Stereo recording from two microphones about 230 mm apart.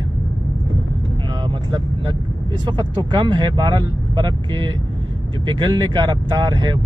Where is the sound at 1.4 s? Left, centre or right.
Right.